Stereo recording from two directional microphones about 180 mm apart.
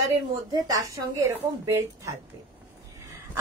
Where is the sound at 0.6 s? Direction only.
20° right (ahead or behind).